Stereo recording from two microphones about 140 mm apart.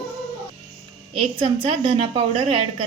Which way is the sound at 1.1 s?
40° right (ahead or behind).